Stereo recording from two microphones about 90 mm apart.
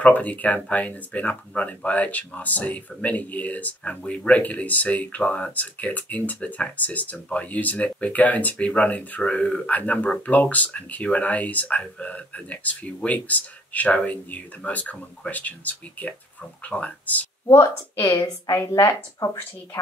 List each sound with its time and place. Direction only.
0.0 s speech: 15° left (ahead or behind)
17.5 s a woman's voice: 35° left (ahead or behind)